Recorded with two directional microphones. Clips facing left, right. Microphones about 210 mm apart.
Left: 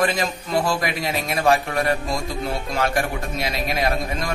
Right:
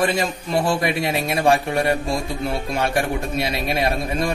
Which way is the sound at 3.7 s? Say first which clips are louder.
Right 1 dB; 25° right (ahead or behind).